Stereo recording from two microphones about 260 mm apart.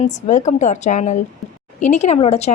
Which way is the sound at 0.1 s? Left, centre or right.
Left.